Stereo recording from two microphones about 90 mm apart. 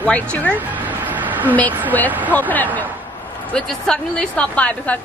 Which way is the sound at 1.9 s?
20° left (ahead or behind).